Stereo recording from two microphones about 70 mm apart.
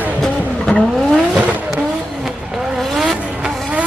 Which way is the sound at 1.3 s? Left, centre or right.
Centre.